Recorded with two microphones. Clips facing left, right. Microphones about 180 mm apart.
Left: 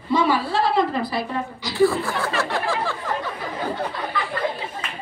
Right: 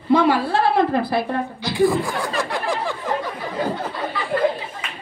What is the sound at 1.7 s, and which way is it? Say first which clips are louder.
Speech: right 1 dB; 15° right (ahead or behind).